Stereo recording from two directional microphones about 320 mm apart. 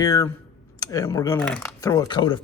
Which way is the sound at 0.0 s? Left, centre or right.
Centre.